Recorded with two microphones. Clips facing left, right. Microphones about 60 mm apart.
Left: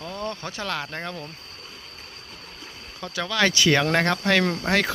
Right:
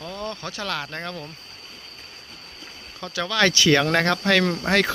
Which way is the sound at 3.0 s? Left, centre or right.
Centre.